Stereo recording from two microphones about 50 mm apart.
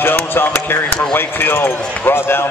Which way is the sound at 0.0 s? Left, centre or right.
Left.